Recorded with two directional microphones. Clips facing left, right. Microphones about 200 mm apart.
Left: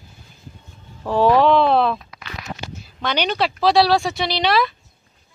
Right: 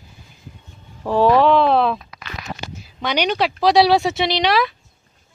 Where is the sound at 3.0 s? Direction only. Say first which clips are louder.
Right 2 dB; 10° right (ahead or behind).